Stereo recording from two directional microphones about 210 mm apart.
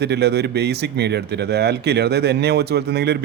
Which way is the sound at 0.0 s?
50° right (ahead or behind).